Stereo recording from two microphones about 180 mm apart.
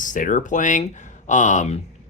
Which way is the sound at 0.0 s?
45° left (ahead or behind).